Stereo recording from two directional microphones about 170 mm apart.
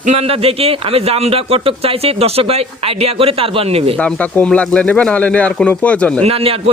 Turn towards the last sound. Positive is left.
turn(degrees=-35)  # may be behind; listen again after turning